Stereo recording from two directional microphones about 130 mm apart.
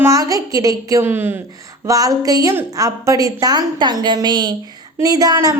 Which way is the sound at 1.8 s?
25° right (ahead or behind).